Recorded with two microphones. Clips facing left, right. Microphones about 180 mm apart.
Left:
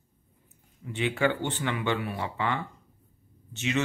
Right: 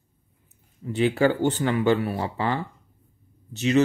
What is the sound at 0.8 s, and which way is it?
Speech, 40° right (ahead or behind).